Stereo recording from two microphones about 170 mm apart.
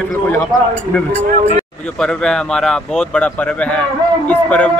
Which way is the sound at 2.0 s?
5° left (ahead or behind).